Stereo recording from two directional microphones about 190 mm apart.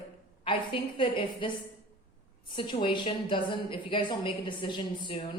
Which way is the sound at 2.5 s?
25° left (ahead or behind).